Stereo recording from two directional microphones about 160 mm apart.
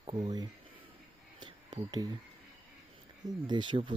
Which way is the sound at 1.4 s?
25° right (ahead or behind).